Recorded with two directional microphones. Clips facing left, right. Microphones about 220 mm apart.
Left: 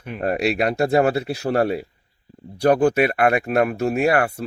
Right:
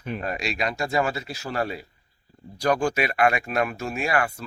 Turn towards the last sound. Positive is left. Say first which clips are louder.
# left 7 dB
turn(degrees=60)  # may be behind; listen again after turning